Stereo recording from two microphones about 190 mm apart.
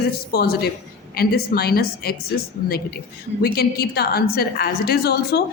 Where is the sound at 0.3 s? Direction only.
55° left (ahead or behind).